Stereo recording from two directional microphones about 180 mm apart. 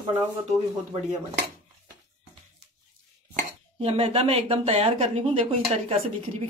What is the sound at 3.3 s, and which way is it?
Speech, 35° right (ahead or behind).